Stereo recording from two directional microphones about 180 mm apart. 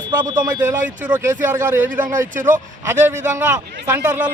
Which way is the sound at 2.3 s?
45° right (ahead or behind).